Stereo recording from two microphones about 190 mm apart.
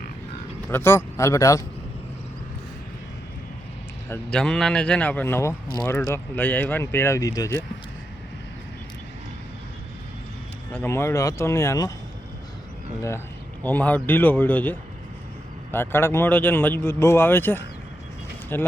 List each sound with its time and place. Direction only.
0.7 s speech: 15° left (ahead or behind)
4.1 s speech: 5° left (ahead or behind)
10.7 s speech: 10° left (ahead or behind)
13.0 s speech: 15° left (ahead or behind)